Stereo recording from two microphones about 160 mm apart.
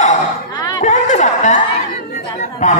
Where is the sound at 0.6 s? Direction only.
25° left (ahead or behind).